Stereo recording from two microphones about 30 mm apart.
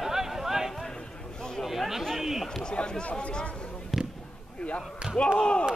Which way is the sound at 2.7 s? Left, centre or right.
Left.